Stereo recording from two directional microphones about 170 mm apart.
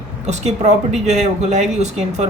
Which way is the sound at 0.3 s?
40° right (ahead or behind).